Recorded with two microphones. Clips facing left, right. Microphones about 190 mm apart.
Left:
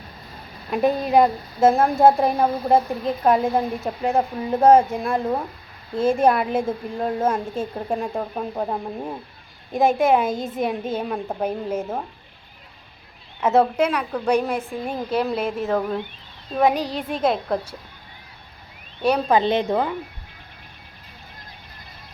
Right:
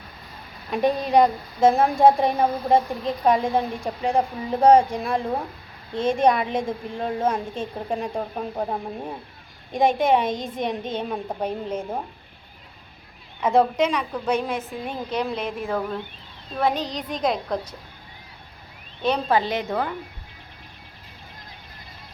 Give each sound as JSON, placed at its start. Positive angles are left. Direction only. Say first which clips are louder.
{"t": 0.7, "sound": "a woman's voice", "louder": "left 1 dB", "side_deg": 5}
{"t": 13.4, "sound": "a woman's voice", "louder": "left 1 dB", "side_deg": 5}
{"t": 19.0, "sound": "a woman's voice", "louder": "left 3 dB", "side_deg": 10}
{"t": 19.4, "sound": "a woman's voice", "louder": "left 5 dB", "side_deg": 25}